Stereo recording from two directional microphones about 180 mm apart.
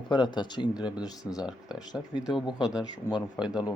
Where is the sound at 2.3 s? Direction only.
25° left (ahead or behind).